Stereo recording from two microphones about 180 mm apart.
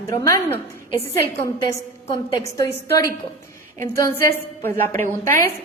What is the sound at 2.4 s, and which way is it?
A woman's voice, 15° left (ahead or behind).